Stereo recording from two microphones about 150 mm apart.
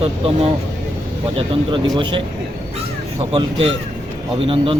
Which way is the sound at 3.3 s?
35° right (ahead or behind).